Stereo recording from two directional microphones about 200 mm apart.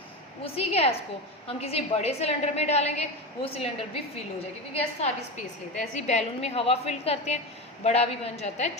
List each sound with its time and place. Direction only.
0.4 s a woman's voice: 30° left (ahead or behind)